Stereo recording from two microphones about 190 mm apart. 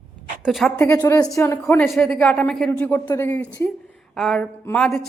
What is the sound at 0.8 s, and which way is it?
Speech, 15° left (ahead or behind).